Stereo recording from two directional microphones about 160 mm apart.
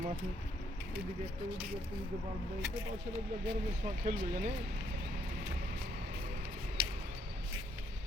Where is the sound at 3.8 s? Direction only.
55° right (ahead or behind).